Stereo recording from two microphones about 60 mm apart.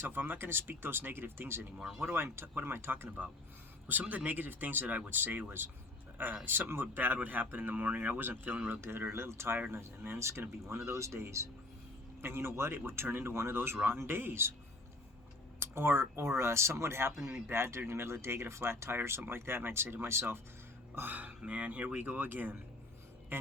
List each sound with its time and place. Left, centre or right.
0.0 s speech: right
4.0 s speech: right
15.5 s speech: right
20.9 s speech: right